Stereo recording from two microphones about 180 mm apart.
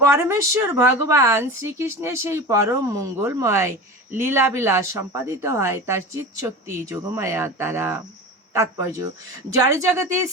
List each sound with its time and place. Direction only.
0.0 s speech: 15° right (ahead or behind)